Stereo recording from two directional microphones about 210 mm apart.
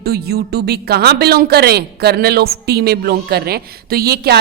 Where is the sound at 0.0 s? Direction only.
50° right (ahead or behind).